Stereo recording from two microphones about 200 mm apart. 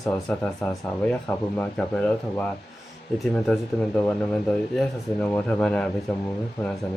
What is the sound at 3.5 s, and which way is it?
Speech, centre (ahead or behind).